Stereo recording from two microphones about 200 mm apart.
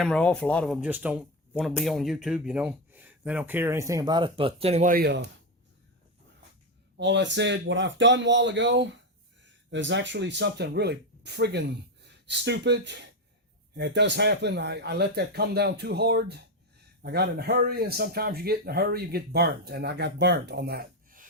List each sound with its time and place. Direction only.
0.0 s speech: 5° left (ahead or behind); by 5.2 s 50° right (ahead or behind)
6.9 s speech: 60° right (ahead or behind)